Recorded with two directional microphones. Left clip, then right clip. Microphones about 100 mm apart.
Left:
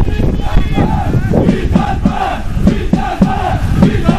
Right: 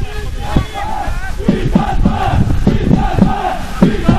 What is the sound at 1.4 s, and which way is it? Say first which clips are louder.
Crowd: left 1 dB; 45° left (ahead or behind).